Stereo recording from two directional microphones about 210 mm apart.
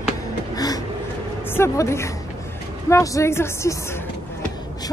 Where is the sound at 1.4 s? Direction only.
10° left (ahead or behind).